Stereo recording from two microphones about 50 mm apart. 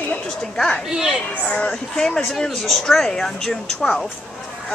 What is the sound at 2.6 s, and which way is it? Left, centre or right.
Speech, centre.